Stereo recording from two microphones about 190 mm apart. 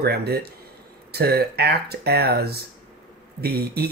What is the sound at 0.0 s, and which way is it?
Speech, 55° right (ahead or behind).